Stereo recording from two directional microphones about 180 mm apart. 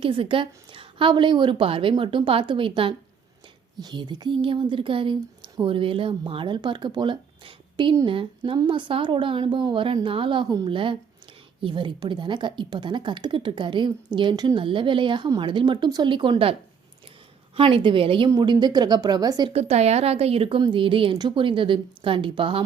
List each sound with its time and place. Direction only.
0.0 s speech: 30° right (ahead or behind)
19.5 s speech: 35° right (ahead or behind)